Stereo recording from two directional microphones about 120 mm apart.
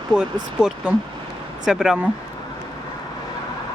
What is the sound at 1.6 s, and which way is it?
Speech, 5° right (ahead or behind).